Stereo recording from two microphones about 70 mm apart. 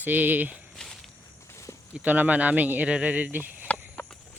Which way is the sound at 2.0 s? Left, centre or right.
Right.